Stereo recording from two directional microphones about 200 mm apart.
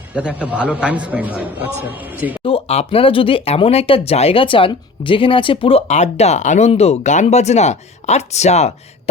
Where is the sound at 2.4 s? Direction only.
30° left (ahead or behind).